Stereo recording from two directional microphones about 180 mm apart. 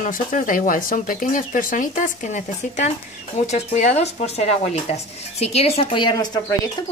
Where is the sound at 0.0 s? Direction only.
50° left (ahead or behind).